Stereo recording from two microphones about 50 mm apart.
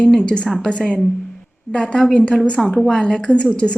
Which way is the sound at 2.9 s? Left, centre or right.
Centre.